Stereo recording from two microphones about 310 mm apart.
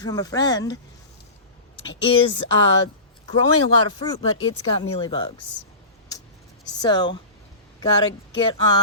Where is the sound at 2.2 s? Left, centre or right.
Left.